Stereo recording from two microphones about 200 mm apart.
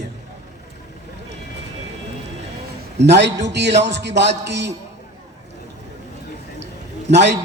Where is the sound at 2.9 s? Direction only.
60° right (ahead or behind).